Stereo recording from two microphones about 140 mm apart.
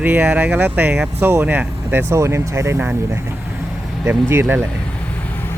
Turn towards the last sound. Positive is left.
turn(degrees=-15)  # may be behind; listen again after turning